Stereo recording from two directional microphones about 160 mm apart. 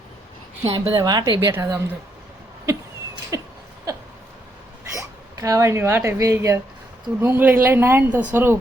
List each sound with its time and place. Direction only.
0.6 s a woman's voice: 35° right (ahead or behind)
3.3 s a woman's voice: 20° right (ahead or behind)
4.9 s speech: 20° right (ahead or behind)